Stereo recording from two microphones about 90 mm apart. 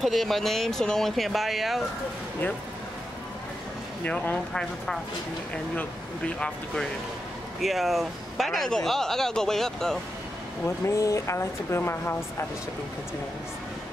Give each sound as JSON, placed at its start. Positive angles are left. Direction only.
{"t": 0.0, "sound": "speech", "side_deg": 0}
{"t": 4.0, "sound": "speech", "side_deg": 20}
{"t": 5.5, "sound": "speech", "side_deg": 15}
{"t": 10.9, "sound": "speech", "side_deg": 35}